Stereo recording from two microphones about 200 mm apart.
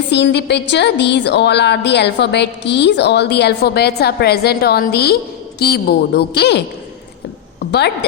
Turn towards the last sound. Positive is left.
turn(degrees=55)  # may be behind; listen again after turning